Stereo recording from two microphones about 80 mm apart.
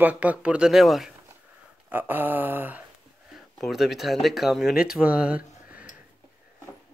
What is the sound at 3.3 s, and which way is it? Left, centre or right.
Speech, centre.